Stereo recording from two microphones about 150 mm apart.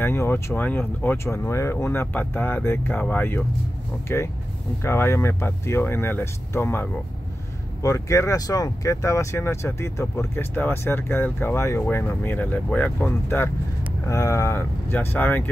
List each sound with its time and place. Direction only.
0.0 s speech: 15° left (ahead or behind)